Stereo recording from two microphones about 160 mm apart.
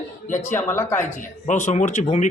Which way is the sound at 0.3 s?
50° left (ahead or behind).